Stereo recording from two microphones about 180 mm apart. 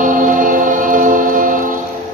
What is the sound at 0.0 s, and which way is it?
Music, 45° right (ahead or behind).